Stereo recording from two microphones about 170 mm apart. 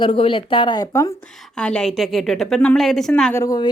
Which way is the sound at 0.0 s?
30° left (ahead or behind).